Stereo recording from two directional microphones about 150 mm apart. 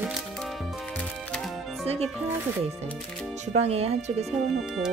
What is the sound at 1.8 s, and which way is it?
Speech, 45° right (ahead or behind).